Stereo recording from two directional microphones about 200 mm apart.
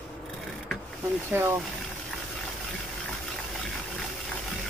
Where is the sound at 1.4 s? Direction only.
10° right (ahead or behind).